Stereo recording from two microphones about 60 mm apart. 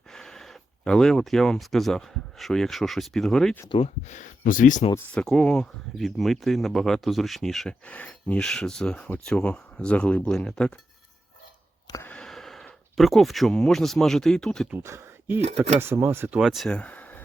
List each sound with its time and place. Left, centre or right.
0.1 s speech: centre
5.1 s speech: centre
6.0 s speech: centre
7.7 s speech: left
8.4 s speech: centre
12.1 s a sound: centre
13.0 s speech: centre
14.8 s speech: right
16.4 s speech: centre
16.6 s a sound: centre